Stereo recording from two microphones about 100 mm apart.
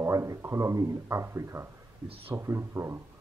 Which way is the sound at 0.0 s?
30° right (ahead or behind).